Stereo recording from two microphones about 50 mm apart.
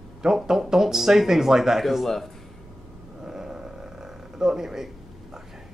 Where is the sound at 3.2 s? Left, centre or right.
Centre.